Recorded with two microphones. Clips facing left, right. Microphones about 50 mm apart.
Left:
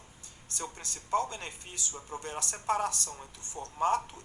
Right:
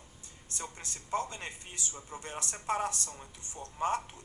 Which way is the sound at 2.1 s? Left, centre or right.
Right.